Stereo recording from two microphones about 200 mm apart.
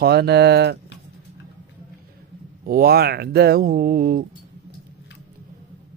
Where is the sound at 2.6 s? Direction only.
50° right (ahead or behind).